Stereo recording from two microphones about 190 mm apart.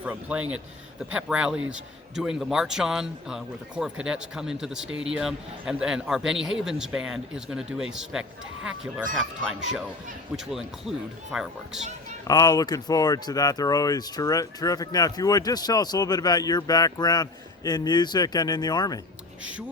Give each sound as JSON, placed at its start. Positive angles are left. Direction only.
{"t": 0.0, "sound": "a man's voice", "side_deg": -5}
{"t": 4.9, "sound": "speech", "side_deg": -90}
{"t": 5.1, "sound": "a man's voice", "side_deg": -5}
{"t": 12.3, "sound": "speech", "side_deg": 20}